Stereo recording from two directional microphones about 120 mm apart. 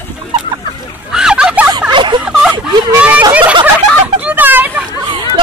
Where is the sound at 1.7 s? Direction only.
40° right (ahead or behind).